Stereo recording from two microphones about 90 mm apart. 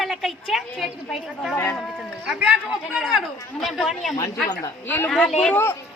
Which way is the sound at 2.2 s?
10° right (ahead or behind).